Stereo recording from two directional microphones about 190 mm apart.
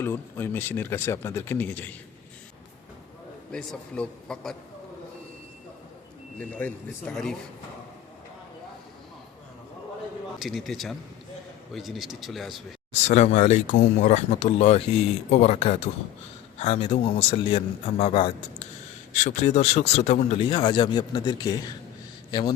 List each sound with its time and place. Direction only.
0.0 s speech: 10° left (ahead or behind)
3.5 s a man's voice: 5° left (ahead or behind)
6.4 s a man's voice: 10° left (ahead or behind)
10.4 s a man's voice: centre (ahead or behind)
12.9 s a man's voice: 40° left (ahead or behind)